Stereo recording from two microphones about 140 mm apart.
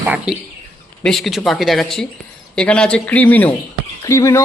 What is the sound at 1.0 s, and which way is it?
A man's voice, centre (ahead or behind).